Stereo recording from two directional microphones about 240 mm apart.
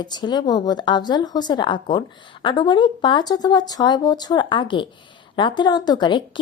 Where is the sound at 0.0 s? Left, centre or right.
Centre.